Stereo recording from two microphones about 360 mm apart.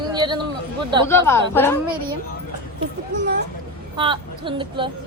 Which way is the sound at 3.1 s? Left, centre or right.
Right.